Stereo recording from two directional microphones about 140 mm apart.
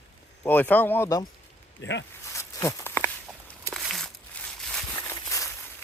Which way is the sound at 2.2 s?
20° left (ahead or behind).